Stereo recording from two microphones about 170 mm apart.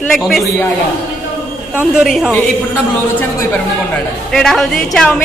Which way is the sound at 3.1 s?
10° left (ahead or behind).